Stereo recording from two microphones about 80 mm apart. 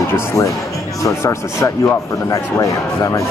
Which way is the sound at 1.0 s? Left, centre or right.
Left.